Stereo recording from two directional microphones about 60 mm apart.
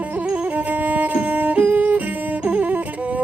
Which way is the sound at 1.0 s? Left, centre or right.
Right.